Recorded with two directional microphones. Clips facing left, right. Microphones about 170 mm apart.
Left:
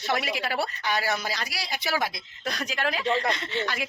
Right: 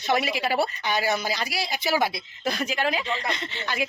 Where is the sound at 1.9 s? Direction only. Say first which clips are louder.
Right 4 dB; 25° right (ahead or behind).